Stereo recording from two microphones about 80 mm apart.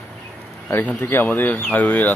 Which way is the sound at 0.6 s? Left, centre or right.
Centre.